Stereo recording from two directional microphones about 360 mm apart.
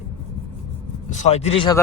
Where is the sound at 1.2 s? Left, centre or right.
Centre.